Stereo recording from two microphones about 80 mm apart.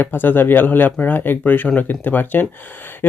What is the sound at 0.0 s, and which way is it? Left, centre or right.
Speech, left.